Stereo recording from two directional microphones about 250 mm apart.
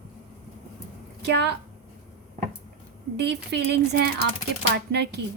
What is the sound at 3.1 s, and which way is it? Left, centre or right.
A woman's voice, right.